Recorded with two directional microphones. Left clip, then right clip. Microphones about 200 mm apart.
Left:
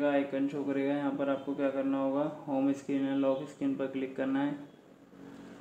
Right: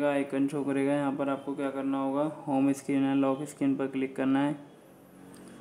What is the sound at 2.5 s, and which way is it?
A man's voice, 30° right (ahead or behind).